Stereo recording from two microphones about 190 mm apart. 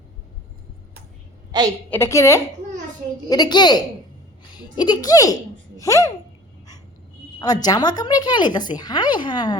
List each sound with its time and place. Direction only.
1.5 s a woman's voice: 20° right (ahead or behind)
1.9 s a woman's voice: 15° left (ahead or behind)
7.3 s speech: 20° left (ahead or behind)